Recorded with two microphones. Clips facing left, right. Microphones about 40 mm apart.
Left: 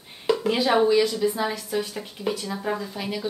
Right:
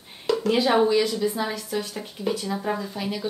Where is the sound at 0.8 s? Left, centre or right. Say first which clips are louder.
Left 1 dB; centre.